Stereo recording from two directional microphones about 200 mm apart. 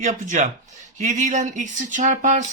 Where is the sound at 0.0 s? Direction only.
35° right (ahead or behind).